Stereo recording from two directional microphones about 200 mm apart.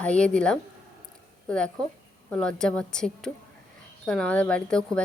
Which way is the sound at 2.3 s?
5° left (ahead or behind).